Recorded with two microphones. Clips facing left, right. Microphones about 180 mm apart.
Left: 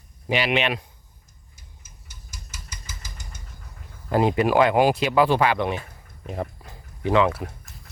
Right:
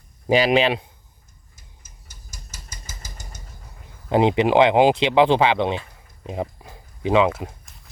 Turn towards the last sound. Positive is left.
turn(degrees=-20)  # may be behind; listen again after turning